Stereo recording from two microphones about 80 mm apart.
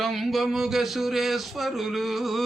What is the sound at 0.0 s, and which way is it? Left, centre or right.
Speech, centre.